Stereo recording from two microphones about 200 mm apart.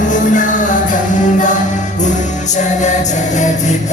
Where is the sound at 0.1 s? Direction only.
40° left (ahead or behind).